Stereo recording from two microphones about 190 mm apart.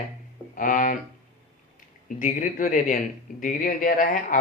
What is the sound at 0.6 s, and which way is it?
Speech, 45° left (ahead or behind).